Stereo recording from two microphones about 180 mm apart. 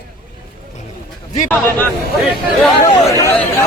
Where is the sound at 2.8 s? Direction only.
15° left (ahead or behind).